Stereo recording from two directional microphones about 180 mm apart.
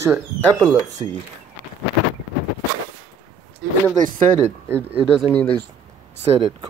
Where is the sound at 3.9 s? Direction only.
50° right (ahead or behind).